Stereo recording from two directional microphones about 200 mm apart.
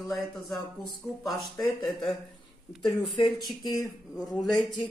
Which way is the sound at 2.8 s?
25° left (ahead or behind).